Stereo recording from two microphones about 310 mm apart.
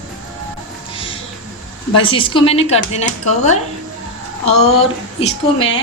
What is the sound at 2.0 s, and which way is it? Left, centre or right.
A woman's voice, centre.